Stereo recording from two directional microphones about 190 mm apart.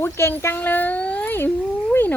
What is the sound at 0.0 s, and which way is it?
Speech, 10° left (ahead or behind).